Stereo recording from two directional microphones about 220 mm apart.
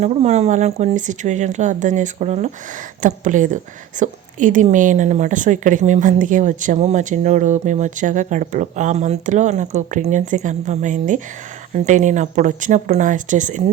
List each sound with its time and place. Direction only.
0.0 s a woman's voice: 30° right (ahead or behind)